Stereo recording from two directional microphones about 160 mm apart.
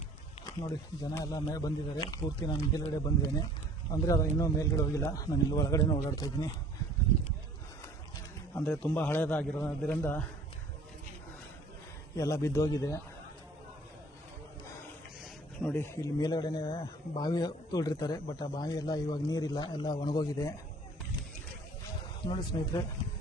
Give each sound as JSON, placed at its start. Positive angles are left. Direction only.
{"t": 1.1, "sound": "a man's voice", "side_deg": 25}
{"t": 8.5, "sound": "a man's voice", "side_deg": 10}
{"t": 12.1, "sound": "a man's voice", "side_deg": 20}
{"t": 15.6, "sound": "a man's voice", "side_deg": 15}
{"t": 16.2, "sound": "a man's voice", "side_deg": 25}
{"t": 22.5, "sound": "a man's voice", "side_deg": 25}